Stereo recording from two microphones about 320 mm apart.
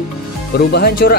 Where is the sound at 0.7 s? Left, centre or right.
Left.